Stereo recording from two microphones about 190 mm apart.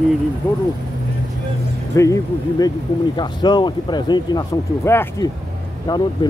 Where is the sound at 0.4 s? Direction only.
10° left (ahead or behind).